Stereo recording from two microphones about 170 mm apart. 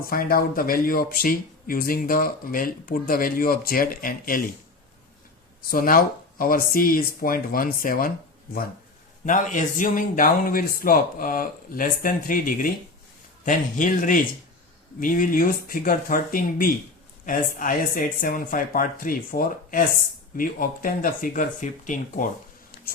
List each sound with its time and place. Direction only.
0.0 s speech: 60° left (ahead or behind)
5.7 s speech: 55° left (ahead or behind)
9.2 s speech: 50° left (ahead or behind)